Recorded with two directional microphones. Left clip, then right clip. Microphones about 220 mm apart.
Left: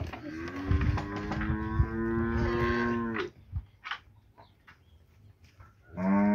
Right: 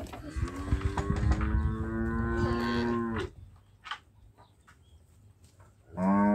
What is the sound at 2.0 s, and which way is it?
Livestock, 50° right (ahead or behind).